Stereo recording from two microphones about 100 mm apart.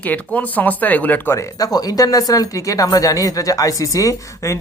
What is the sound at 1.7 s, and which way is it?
Speech, 40° left (ahead or behind).